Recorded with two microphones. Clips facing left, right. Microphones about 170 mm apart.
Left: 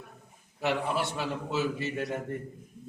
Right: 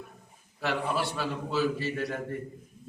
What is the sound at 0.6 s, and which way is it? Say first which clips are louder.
A man's voice: left 1 dB; 20° left (ahead or behind).